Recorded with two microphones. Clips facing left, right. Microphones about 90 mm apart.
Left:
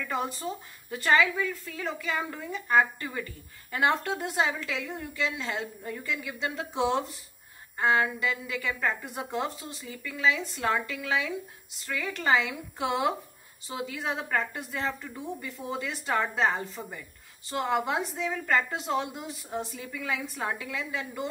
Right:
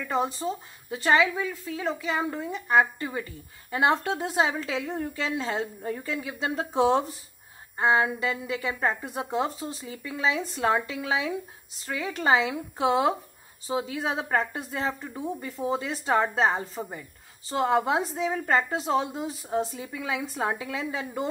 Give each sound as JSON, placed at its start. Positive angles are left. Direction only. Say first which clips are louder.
{"t": 0.0, "sound": "a woman's voice", "louder": "right 4 dB", "side_deg": -25}
{"t": 7.7, "sound": "a woman's voice", "louder": "right 2 dB", "side_deg": -25}
{"t": 19.8, "sound": "a woman's voice", "louder": "right 2 dB", "side_deg": -20}